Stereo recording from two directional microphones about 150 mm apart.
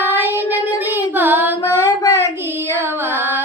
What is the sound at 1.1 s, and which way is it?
Female singing, 15° right (ahead or behind).